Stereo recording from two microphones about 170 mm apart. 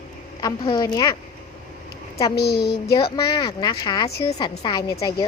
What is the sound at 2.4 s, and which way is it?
Speech, 70° left (ahead or behind).